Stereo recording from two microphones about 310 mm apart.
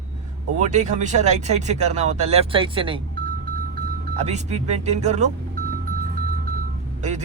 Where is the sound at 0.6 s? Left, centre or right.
Right.